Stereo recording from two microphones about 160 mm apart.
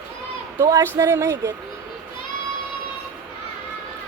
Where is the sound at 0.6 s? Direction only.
20° right (ahead or behind).